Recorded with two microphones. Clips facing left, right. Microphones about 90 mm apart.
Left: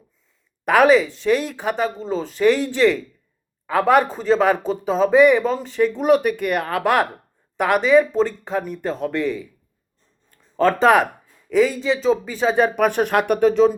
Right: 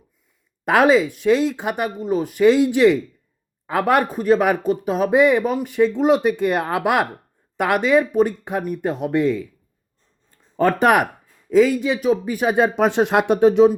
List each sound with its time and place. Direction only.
0.7 s speech: 20° right (ahead or behind)
10.6 s speech: 15° right (ahead or behind)